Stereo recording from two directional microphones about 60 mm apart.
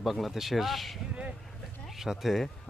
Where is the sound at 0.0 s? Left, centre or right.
Centre.